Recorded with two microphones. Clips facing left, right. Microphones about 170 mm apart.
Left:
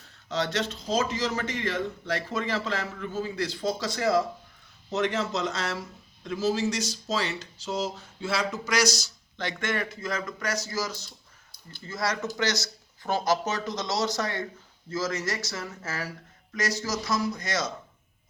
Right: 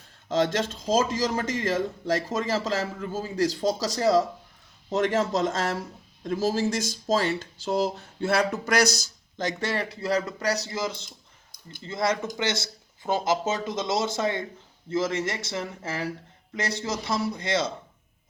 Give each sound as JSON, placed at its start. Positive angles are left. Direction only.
{"t": 0.3, "sound": "a man's voice", "side_deg": -45}
{"t": 4.9, "sound": "speech", "side_deg": -50}
{"t": 9.4, "sound": "a man's voice", "side_deg": -40}